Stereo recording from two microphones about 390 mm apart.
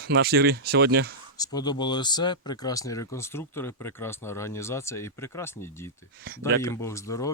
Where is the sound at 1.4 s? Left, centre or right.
Centre.